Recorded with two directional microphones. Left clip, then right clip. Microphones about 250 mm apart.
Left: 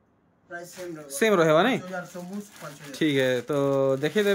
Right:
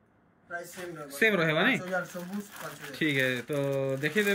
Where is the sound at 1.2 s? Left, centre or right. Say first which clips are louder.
Left 5 dB; centre.